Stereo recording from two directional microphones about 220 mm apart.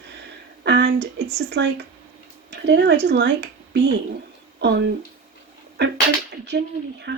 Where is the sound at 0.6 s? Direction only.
50° right (ahead or behind).